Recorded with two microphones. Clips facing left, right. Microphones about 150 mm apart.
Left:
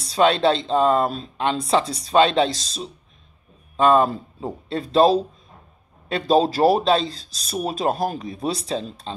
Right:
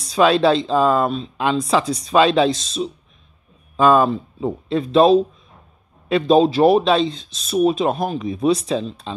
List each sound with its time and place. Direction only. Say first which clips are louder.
0.0 s a man's voice: right 3 dB; 30° left (ahead or behind)